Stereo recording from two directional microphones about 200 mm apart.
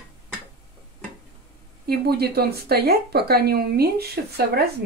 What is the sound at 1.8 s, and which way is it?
Speech, 50° right (ahead or behind).